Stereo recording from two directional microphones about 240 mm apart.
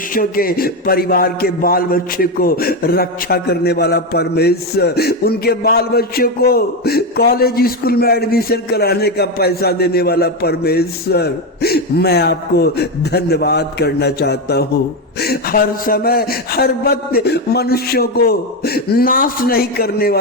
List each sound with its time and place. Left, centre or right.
0.1 s a man's voice: left